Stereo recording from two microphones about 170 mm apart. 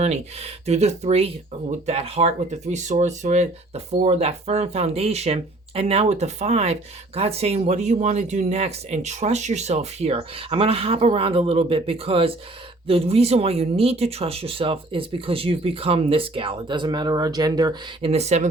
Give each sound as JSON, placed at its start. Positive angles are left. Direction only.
{"t": 0.0, "sound": "speech", "side_deg": -40}
{"t": 18.1, "sound": "speech", "side_deg": -40}